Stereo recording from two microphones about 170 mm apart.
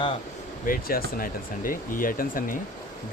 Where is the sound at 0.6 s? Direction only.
55° left (ahead or behind).